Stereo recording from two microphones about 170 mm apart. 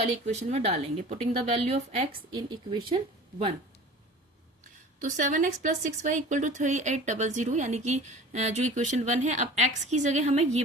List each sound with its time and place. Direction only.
0.0 s a woman's voice: 40° right (ahead or behind)
2.3 s speech: 25° right (ahead or behind)
4.9 s speech: 50° right (ahead or behind)